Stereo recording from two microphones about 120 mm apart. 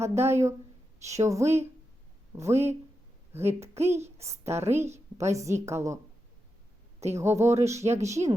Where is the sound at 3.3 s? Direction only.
20° right (ahead or behind).